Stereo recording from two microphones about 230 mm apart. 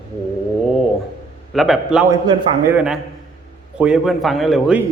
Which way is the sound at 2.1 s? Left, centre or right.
Centre.